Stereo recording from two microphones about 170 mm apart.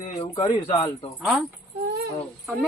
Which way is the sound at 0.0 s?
35° left (ahead or behind).